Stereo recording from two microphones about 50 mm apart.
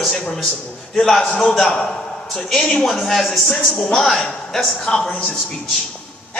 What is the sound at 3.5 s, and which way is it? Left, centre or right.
A woman's voice, centre.